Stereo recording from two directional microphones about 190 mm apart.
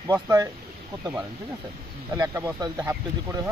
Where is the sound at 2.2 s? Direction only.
15° right (ahead or behind).